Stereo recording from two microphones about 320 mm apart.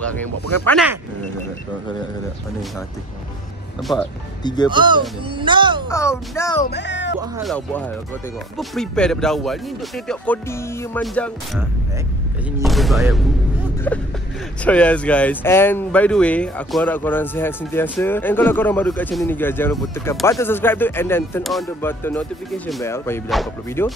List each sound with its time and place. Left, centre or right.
0.7 s speech: centre
3.9 s speech: centre
4.6 s a child's voice: centre
5.9 s speech: centre
6.6 s speech: left
7.3 s speech: centre